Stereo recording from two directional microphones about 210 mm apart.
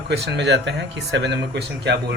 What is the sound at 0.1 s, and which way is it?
Speech, 55° right (ahead or behind).